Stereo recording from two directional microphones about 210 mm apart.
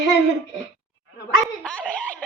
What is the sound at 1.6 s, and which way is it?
Speech, 5° left (ahead or behind).